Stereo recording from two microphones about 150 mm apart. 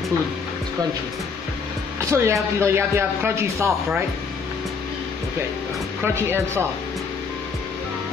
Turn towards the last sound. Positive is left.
turn(degrees=-15)  # may be behind; listen again after turning